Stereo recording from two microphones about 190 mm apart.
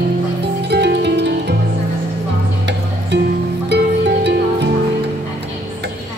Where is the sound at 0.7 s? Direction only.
60° right (ahead or behind).